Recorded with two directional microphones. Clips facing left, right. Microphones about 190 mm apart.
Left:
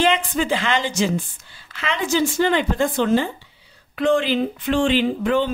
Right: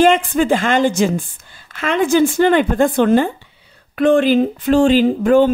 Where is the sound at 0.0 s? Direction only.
50° right (ahead or behind).